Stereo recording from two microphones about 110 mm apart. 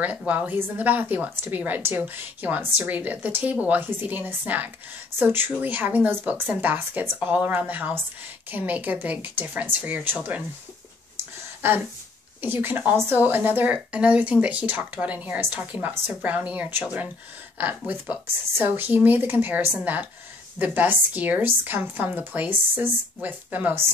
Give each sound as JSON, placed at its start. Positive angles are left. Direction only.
{"t": 0.3, "sound": "a woman's voice", "side_deg": -15}
{"t": 11.6, "sound": "a woman's voice", "side_deg": -20}